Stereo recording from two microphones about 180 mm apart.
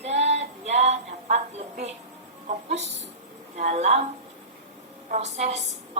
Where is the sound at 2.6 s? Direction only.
40° right (ahead or behind).